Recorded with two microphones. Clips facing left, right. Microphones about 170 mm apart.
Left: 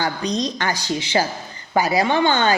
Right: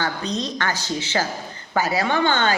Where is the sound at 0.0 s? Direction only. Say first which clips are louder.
Left 3 dB; 15° left (ahead or behind).